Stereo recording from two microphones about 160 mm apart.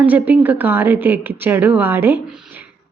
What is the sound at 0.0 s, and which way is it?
A woman's voice, 10° right (ahead or behind).